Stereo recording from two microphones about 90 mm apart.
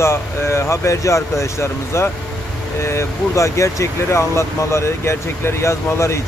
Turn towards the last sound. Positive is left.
turn(degrees=30)  # may be behind; listen again after turning